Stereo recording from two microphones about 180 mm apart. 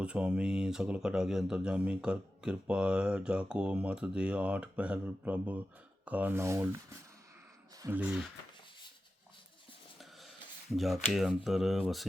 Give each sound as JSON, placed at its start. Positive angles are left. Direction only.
{"t": 0.0, "sound": "speech", "side_deg": -5}
{"t": 10.0, "sound": "a sound", "side_deg": 0}
{"t": 10.8, "sound": "speech", "side_deg": 0}